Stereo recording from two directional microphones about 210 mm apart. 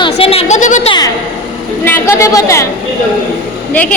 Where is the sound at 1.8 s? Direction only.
10° left (ahead or behind).